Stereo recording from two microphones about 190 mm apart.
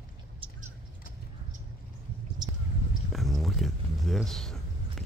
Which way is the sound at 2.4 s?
20° right (ahead or behind).